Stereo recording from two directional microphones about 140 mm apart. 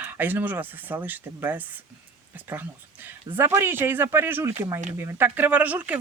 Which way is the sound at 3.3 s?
15° right (ahead or behind).